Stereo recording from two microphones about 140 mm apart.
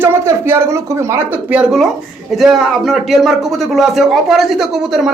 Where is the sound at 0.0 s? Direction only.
15° right (ahead or behind).